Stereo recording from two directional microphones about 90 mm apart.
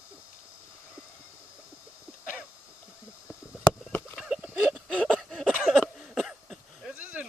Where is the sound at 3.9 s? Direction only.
25° left (ahead or behind).